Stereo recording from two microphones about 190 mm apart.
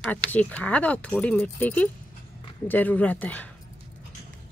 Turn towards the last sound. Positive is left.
turn(degrees=10)  # may be behind; listen again after turning